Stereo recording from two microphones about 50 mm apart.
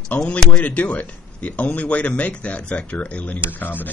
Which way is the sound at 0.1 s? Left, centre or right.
Left.